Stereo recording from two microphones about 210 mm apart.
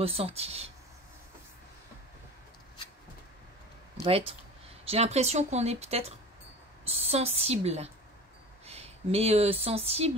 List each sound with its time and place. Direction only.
0.0 s a woman's voice: 30° right (ahead or behind)
4.0 s a woman's voice: 25° right (ahead or behind)